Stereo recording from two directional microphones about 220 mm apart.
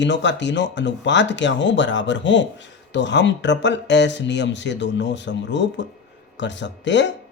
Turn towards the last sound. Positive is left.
turn(degrees=55)  # may be behind; listen again after turning